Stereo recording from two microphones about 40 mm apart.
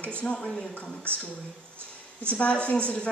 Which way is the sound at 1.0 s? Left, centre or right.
Left.